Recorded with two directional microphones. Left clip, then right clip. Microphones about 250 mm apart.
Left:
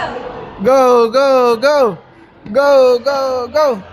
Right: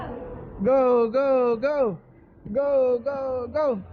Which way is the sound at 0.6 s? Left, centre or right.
Centre.